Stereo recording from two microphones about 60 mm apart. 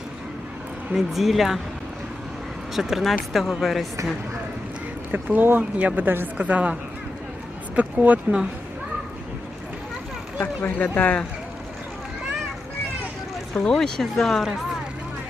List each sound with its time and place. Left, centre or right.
0.9 s speech: centre
2.7 s speech: centre
5.1 s a woman's voice: right
7.8 s a woman's voice: right
10.4 s a man's voice: left
13.5 s speech: centre